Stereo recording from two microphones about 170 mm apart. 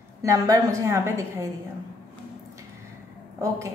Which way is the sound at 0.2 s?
20° right (ahead or behind).